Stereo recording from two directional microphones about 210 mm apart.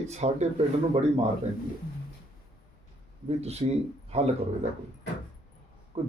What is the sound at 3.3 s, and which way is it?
Speech, 30° right (ahead or behind).